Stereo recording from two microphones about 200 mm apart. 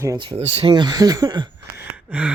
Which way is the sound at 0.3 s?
30° right (ahead or behind).